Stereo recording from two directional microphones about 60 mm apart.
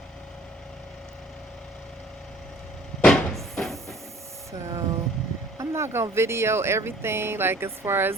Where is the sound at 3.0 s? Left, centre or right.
Centre.